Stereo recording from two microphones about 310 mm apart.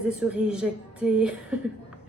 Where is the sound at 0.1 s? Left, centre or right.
Centre.